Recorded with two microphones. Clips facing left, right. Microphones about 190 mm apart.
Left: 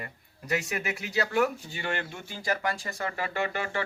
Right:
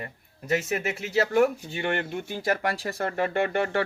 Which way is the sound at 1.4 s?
55° right (ahead or behind).